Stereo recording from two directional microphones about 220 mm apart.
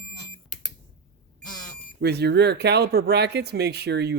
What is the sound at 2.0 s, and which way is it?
Speech, 50° right (ahead or behind).